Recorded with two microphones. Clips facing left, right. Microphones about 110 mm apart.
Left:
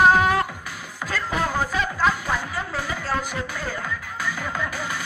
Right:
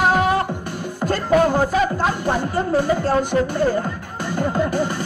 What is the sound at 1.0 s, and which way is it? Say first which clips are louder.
Music: right 9 dB; 55° right (ahead or behind).